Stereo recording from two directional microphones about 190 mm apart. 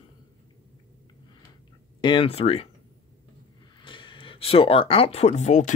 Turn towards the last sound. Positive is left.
turn(degrees=40)  # may be behind; listen again after turning